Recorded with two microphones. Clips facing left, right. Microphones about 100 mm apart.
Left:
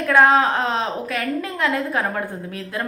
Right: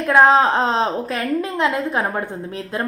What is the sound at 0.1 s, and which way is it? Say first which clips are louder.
A woman's voice: right 2 dB; 25° right (ahead or behind).